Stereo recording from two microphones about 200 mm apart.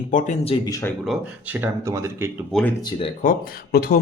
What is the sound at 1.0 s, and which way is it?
Speech, 5° right (ahead or behind).